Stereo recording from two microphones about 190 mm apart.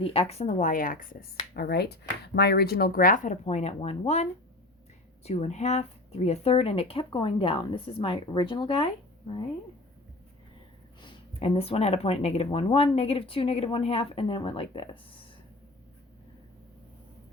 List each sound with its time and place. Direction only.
0.0 s speech: 30° left (ahead or behind); by 1.0 s 45° left (ahead or behind)
1.5 s speech: 55° left (ahead or behind); by 8.9 s 25° left (ahead or behind)
11.0 s speech: 30° left (ahead or behind)